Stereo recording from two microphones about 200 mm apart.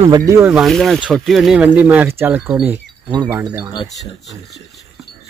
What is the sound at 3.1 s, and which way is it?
Speech, 20° right (ahead or behind).